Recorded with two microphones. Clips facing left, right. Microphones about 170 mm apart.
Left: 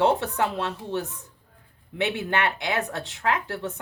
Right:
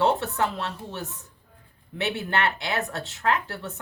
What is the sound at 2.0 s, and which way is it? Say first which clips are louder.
Speech: left 1 dB; 15° left (ahead or behind).